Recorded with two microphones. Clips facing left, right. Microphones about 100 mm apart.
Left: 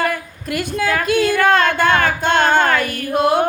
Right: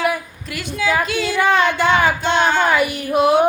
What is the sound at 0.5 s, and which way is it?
Speech, 50° left (ahead or behind).